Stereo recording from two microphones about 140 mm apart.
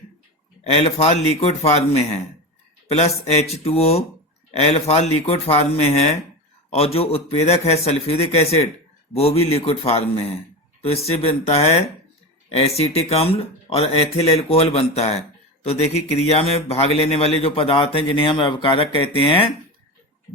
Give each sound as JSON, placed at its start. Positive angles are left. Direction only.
{"t": 0.6, "sound": "speech", "side_deg": 45}
{"t": 3.2, "sound": "speech", "side_deg": 50}